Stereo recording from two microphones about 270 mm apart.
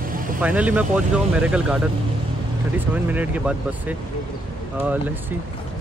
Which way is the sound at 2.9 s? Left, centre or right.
Centre.